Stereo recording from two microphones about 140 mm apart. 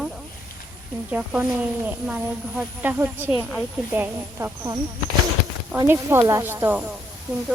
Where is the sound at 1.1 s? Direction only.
10° right (ahead or behind).